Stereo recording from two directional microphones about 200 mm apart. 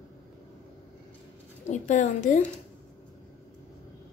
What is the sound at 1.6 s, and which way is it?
Speech, 35° left (ahead or behind).